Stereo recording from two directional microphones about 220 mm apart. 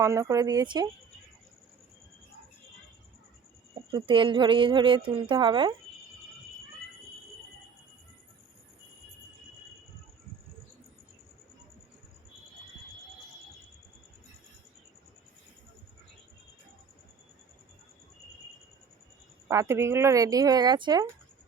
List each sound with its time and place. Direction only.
0.0 s speech: 15° right (ahead or behind)
3.9 s speech: 20° right (ahead or behind)
19.5 s speech: 15° right (ahead or behind)